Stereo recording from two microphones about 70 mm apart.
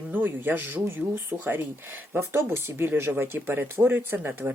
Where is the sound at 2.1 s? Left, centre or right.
Right.